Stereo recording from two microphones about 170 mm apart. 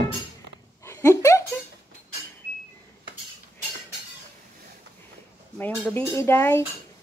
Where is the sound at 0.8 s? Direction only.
20° left (ahead or behind).